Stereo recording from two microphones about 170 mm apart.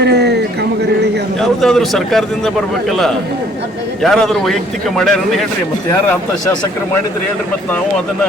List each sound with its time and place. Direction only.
0.0 s a sound: 80° right
1.4 s a man's voice: centre (ahead or behind)
4.0 s a man's voice: centre (ahead or behind)